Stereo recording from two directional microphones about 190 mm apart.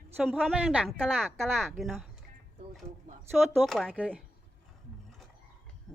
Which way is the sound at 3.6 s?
Centre (ahead or behind).